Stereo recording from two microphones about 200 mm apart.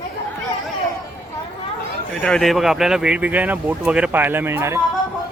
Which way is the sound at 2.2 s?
Centre (ahead or behind).